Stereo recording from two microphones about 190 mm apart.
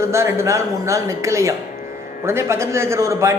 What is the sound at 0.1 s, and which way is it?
A man's voice, 15° right (ahead or behind).